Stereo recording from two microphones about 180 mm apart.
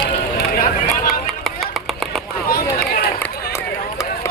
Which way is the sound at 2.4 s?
55° left (ahead or behind).